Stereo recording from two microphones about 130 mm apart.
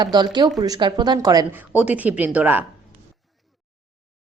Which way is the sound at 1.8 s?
10° right (ahead or behind).